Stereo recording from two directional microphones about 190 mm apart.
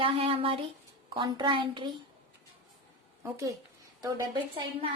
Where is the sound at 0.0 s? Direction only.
30° right (ahead or behind).